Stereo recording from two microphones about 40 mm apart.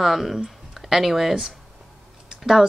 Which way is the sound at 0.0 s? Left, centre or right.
Centre.